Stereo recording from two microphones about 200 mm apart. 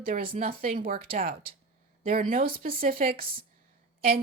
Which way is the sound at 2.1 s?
45° right (ahead or behind).